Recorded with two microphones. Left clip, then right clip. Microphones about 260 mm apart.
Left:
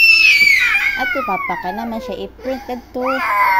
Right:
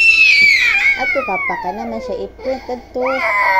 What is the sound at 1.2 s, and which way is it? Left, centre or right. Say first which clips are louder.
Speech: right 1 dB; left.